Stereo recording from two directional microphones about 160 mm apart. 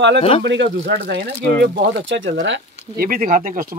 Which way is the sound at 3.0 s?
60° right (ahead or behind).